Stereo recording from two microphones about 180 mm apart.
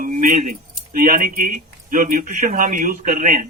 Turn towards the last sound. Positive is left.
turn(degrees=-45)  # may be behind; listen again after turning